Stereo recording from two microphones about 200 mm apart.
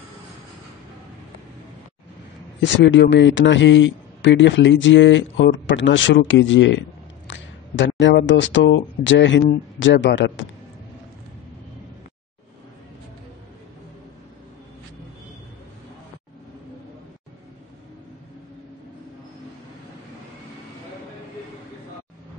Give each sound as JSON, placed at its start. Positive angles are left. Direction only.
{"t": 2.6, "sound": "a man's voice", "side_deg": 60}